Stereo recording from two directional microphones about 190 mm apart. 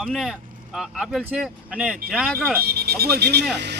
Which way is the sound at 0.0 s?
Centre (ahead or behind).